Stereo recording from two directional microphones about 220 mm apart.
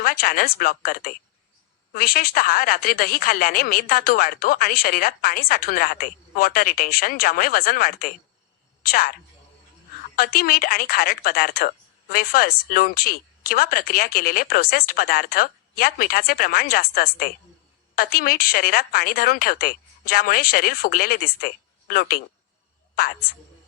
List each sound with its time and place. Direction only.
0.0 s a woman's voice: 40° left (ahead or behind)
10.2 s a woman's voice: 40° left (ahead or behind)